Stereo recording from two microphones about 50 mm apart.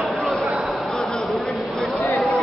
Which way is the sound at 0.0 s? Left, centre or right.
Centre.